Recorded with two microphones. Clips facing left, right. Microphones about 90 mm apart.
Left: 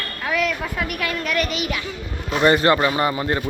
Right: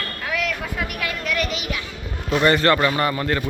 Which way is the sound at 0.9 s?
55° left (ahead or behind).